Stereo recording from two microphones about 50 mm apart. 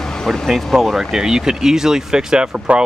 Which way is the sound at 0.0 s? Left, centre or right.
Centre.